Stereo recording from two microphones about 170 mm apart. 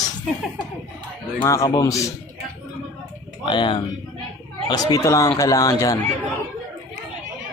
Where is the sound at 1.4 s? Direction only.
20° left (ahead or behind).